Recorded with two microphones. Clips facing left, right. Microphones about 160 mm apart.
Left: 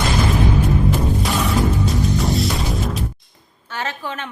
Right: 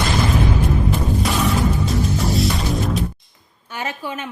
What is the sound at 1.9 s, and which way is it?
Music, centre (ahead or behind).